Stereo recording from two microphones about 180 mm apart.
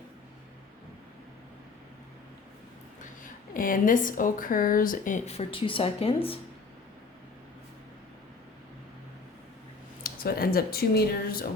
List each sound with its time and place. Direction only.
3.2 s a woman's voice: 50° left (ahead or behind); by 6.4 s 30° left (ahead or behind)
10.0 s speech: 55° left (ahead or behind)